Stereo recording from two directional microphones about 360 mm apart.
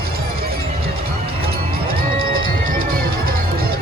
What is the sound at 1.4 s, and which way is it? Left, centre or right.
Music, right.